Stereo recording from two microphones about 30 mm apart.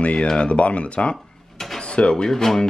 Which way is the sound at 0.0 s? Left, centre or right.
Left.